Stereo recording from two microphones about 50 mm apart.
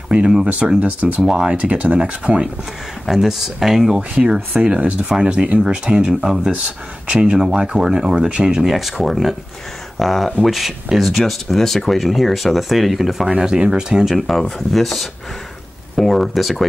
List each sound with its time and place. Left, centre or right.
0.1 s speech: centre
0.7 s speech: right
1.2 s speech: centre
1.6 s speech: right
3.1 s speech: centre
4.1 s speech: right
7.1 s speech: right
8.6 s speech: centre
13.3 s speech: centre
14.1 s speech: centre